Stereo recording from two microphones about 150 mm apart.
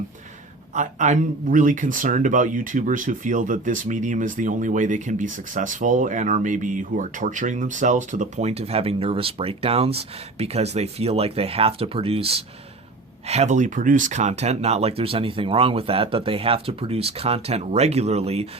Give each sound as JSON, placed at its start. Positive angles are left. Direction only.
{"t": 0.7, "sound": "speech", "side_deg": -55}